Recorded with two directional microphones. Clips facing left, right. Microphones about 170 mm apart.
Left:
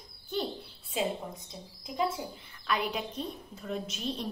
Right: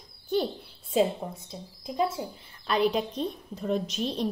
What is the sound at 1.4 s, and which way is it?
A woman's voice, 25° right (ahead or behind).